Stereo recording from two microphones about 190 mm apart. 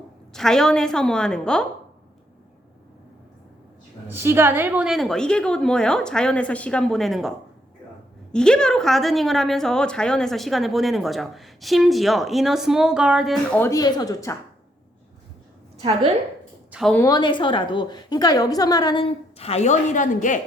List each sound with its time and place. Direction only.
0.3 s a woman's voice: 5° left (ahead or behind)
4.1 s a woman's voice: 10° right (ahead or behind); by 13.7 s 5° left (ahead or behind)
13.7 s a woman's voice: 20° left (ahead or behind)
16.7 s a woman's voice: centre (ahead or behind)
17.0 s a woman's voice: 20° left (ahead or behind); by 20.4 s 40° left (ahead or behind)